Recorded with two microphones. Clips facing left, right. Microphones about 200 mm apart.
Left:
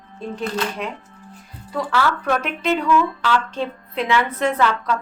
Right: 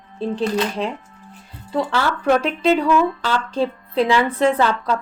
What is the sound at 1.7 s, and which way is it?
A woman's voice, 25° right (ahead or behind).